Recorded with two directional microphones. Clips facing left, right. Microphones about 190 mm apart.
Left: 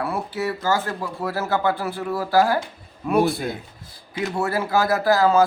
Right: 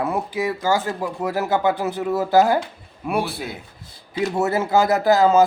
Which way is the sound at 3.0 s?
10° right (ahead or behind).